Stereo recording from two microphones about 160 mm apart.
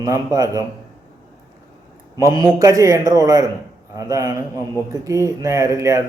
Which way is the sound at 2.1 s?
25° right (ahead or behind).